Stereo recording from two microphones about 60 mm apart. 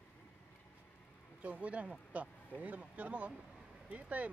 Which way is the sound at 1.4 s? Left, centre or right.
Right.